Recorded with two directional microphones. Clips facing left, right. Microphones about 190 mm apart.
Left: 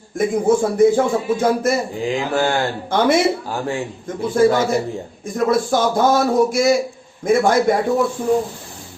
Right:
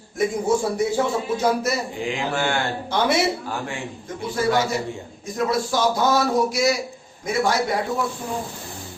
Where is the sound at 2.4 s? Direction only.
40° left (ahead or behind).